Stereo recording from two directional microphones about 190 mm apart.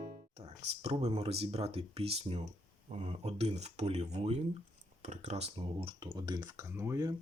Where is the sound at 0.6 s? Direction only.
35° right (ahead or behind); by 7.1 s 15° right (ahead or behind).